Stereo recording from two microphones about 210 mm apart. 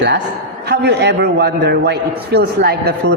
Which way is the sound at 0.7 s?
50° right (ahead or behind).